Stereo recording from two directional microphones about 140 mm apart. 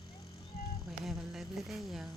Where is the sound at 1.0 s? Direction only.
5° right (ahead or behind).